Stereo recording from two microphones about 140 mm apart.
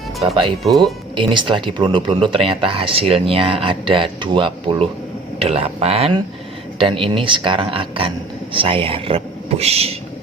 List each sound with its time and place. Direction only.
1.1 s speech: 35° right (ahead or behind)
5.4 s speech: 45° right (ahead or behind)